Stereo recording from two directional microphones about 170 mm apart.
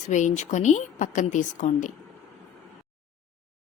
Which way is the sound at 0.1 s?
45° left (ahead or behind).